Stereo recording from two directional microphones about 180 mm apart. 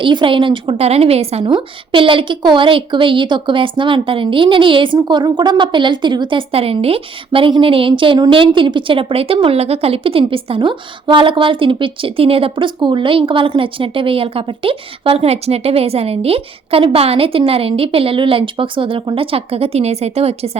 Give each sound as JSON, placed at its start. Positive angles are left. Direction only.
{"t": 0.0, "sound": "a woman's voice", "side_deg": -25}